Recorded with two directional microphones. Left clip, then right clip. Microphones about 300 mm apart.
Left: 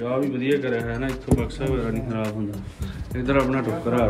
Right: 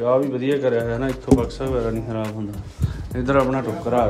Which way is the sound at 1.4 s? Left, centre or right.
Centre.